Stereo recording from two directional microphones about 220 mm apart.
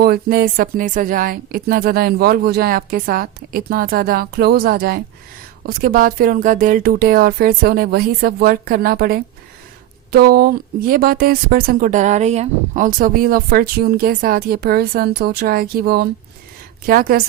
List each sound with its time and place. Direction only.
0.0 s a woman's voice: 45° right (ahead or behind)